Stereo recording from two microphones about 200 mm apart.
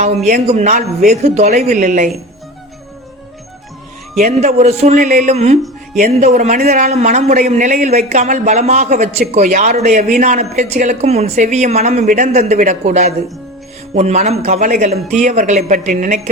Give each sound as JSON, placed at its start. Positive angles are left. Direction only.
{"t": 0.3, "sound": "speech", "side_deg": -35}
{"t": 4.2, "sound": "speech", "side_deg": -35}